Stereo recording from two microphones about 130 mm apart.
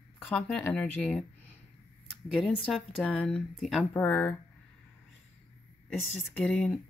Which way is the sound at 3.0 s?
10° left (ahead or behind).